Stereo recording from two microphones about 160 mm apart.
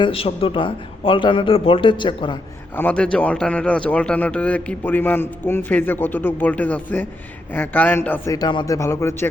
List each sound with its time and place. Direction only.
0.0 s a man's voice: 35° left (ahead or behind)
2.7 s a man's voice: 10° left (ahead or behind)
8.4 s a man's voice: 25° left (ahead or behind)